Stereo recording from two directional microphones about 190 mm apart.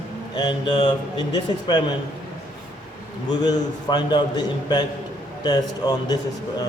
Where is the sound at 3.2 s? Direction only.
20° left (ahead or behind).